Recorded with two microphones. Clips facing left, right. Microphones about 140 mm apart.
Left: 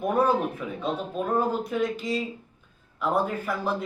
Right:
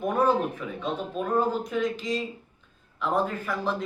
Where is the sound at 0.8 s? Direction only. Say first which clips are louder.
Left 1 dB; 5° left (ahead or behind).